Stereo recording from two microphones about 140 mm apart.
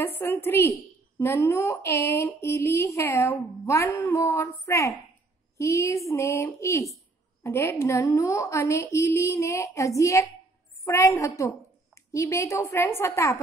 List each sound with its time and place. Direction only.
0.0 s a woman's voice: 15° left (ahead or behind)